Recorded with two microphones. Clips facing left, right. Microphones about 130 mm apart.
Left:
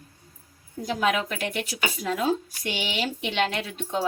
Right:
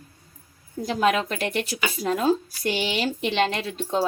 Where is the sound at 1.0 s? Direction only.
35° right (ahead or behind).